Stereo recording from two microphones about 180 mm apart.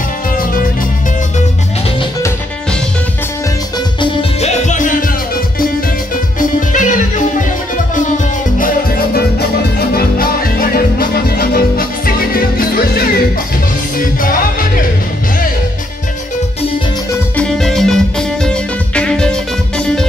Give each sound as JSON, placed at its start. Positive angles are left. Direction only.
{"t": 4.0, "sound": "music", "side_deg": 35}
{"t": 6.7, "sound": "music", "side_deg": 45}
{"t": 17.4, "sound": "music", "side_deg": 0}